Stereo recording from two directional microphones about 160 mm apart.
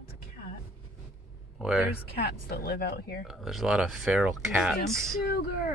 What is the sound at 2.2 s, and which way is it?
Speech, 75° left (ahead or behind).